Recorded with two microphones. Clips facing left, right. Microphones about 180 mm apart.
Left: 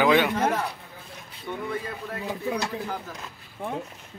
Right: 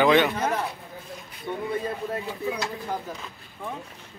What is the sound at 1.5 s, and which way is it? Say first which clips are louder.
Speech: right 2 dB; 20° right (ahead or behind).